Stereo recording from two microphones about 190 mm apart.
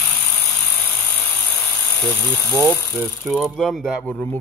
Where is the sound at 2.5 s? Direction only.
10° left (ahead or behind).